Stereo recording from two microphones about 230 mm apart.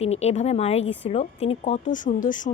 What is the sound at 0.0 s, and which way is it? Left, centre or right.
A woman's voice, left.